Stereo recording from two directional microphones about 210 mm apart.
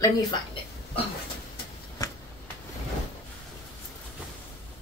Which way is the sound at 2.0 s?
15° left (ahead or behind).